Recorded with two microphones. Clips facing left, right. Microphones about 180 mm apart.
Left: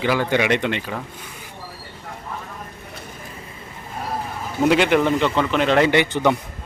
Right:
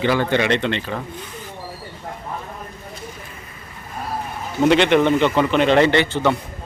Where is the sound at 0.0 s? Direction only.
10° left (ahead or behind).